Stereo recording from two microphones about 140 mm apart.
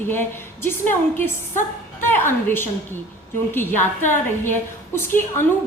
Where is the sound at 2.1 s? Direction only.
15° left (ahead or behind).